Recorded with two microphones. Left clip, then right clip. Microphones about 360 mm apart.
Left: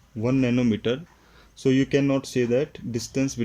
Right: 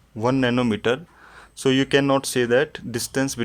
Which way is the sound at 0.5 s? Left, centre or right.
Centre.